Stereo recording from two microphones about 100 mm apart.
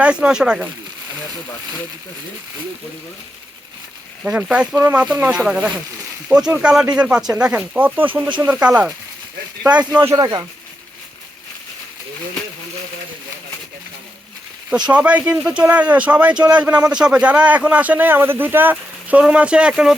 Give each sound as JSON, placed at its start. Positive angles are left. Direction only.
{"t": 0.0, "sound": "speech", "side_deg": -10}
{"t": 4.2, "sound": "speech", "side_deg": -10}
{"t": 10.2, "sound": "speech", "side_deg": -45}
{"t": 14.8, "sound": "speech", "side_deg": -10}